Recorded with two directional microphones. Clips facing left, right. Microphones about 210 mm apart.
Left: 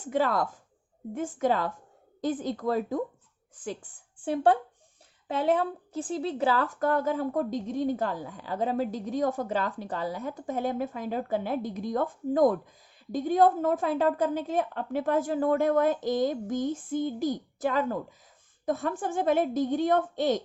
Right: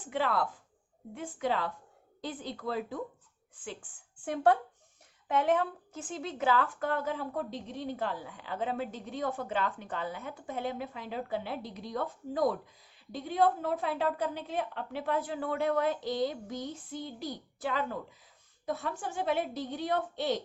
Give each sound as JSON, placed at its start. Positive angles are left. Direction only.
{"t": 0.0, "sound": "a woman's voice", "side_deg": 40}